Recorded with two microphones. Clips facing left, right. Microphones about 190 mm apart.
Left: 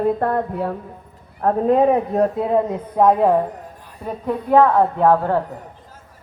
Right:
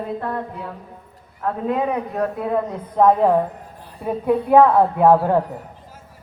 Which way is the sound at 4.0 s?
10° right (ahead or behind).